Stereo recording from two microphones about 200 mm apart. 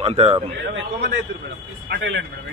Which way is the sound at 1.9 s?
65° right (ahead or behind).